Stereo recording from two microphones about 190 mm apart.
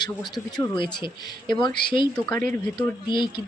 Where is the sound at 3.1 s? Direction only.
25° left (ahead or behind).